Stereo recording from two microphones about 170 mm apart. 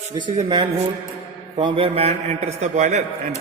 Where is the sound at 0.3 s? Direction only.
30° right (ahead or behind).